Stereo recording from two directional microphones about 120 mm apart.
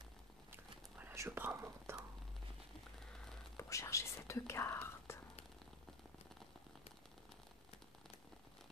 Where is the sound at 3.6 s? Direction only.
25° left (ahead or behind).